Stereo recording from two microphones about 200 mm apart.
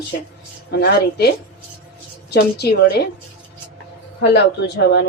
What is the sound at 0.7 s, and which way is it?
Speech, 55° left (ahead or behind).